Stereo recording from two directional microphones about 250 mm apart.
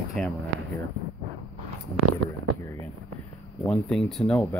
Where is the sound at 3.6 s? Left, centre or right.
Centre.